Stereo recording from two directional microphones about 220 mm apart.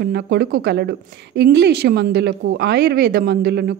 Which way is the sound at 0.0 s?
45° right (ahead or behind).